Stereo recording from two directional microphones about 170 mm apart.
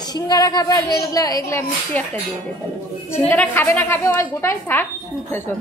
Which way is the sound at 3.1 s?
10° left (ahead or behind).